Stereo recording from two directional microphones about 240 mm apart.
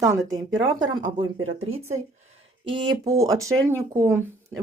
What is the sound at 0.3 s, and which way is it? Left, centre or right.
Speech, centre.